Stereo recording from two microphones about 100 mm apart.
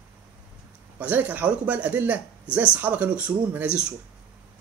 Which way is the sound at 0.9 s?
15° right (ahead or behind).